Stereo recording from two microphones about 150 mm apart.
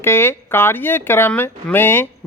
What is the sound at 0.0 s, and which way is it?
Speech, 15° left (ahead or behind).